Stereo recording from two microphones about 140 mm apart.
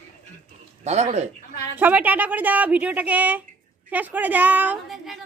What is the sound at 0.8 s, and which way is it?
Speech, 55° right (ahead or behind).